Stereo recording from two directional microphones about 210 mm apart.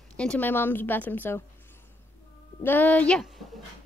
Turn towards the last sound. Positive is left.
turn(degrees=0)  # may be behind; listen again after turning